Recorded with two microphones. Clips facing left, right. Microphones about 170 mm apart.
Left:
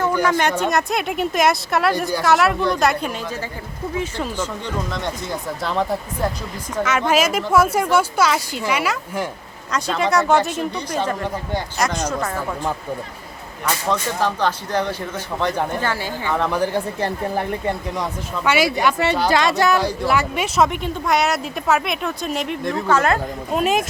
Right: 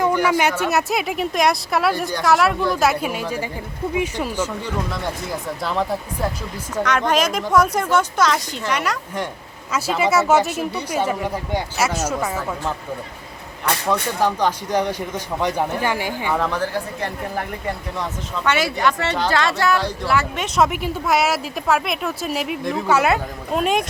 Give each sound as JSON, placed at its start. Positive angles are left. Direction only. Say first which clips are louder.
{"t": 0.0, "sound": "speech", "louder": "right 1 dB", "side_deg": -10}
{"t": 9.7, "sound": "speech", "louder": "right 1 dB", "side_deg": -5}
{"t": 13.9, "sound": "speech", "louder": "right 2 dB", "side_deg": -15}
{"t": 17.9, "sound": "speech", "louder": "left 1 dB", "side_deg": 10}
{"t": 20.6, "sound": "speech", "louder": "right 1 dB", "side_deg": -5}